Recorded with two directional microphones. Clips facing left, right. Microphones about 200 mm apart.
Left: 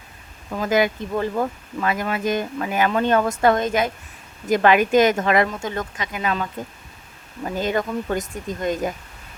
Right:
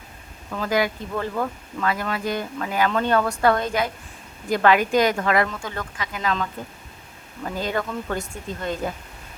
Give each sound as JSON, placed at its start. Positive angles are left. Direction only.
{"t": 0.5, "sound": "speech", "side_deg": 15}